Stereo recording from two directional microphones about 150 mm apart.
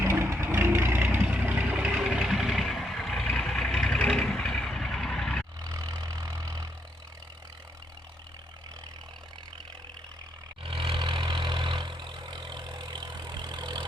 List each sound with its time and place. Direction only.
0.0 s vehicle: 15° right (ahead or behind); by 5.5 s 5° left (ahead or behind)
5.6 s vehicle: 25° right (ahead or behind)
10.6 s vehicle: 35° right (ahead or behind)